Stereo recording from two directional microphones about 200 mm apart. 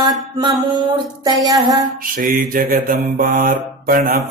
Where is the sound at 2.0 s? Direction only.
45° right (ahead or behind).